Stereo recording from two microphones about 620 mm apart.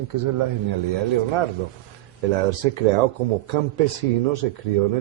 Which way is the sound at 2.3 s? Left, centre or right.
Right.